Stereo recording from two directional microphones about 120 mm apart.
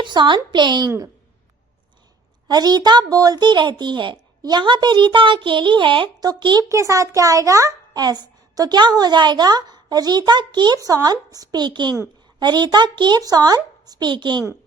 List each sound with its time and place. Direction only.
0.0 s a child's voice: 40° right (ahead or behind)
0.9 s a woman's voice: 25° right (ahead or behind)
2.5 s a child's voice: 35° right (ahead or behind)